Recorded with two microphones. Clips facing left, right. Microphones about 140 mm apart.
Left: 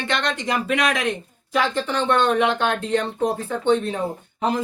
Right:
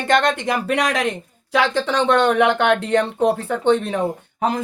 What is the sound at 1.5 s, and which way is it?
Speech, 90° right.